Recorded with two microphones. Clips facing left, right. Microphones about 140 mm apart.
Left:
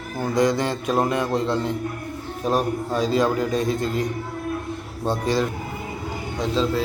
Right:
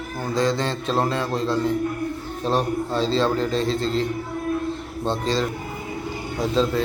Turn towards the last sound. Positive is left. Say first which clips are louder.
# right 1 dB
turn(degrees=0)  # may be behind; listen again after turning